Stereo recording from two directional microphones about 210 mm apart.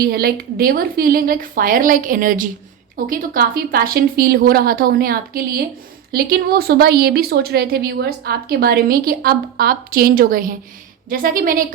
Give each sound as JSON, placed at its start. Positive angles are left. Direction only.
{"t": 0.0, "sound": "a woman's voice", "side_deg": -45}